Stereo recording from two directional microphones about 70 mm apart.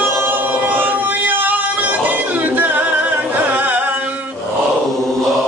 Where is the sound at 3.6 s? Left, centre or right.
Right.